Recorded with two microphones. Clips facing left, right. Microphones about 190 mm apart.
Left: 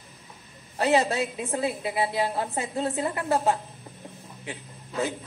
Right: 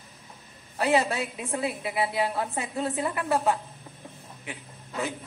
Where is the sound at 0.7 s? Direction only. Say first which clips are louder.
Left 2 dB; 30° left (ahead or behind).